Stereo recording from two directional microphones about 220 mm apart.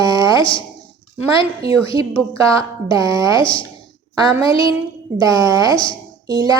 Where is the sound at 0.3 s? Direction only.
20° left (ahead or behind).